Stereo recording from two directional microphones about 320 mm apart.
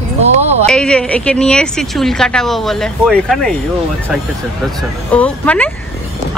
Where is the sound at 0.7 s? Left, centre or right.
Centre.